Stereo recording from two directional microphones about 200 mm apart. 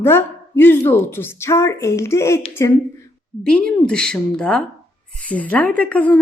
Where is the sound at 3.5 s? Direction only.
5° left (ahead or behind).